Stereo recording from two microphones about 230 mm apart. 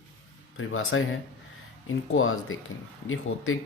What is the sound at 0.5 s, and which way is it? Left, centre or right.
Speech, left.